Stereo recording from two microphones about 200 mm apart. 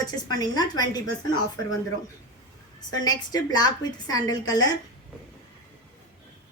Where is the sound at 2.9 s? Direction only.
20° left (ahead or behind).